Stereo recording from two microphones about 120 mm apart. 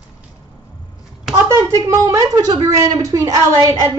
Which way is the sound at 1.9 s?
30° right (ahead or behind).